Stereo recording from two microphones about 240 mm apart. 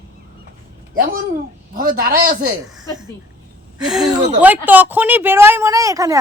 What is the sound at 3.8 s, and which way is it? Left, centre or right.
A woman's voice, centre.